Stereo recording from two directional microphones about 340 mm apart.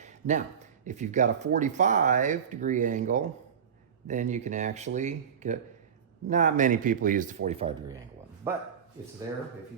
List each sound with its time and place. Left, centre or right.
0.0 s speech: right
8.4 s speech: centre